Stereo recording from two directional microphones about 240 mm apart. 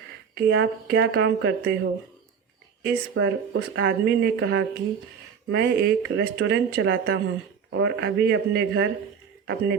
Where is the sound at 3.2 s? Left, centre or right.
Right.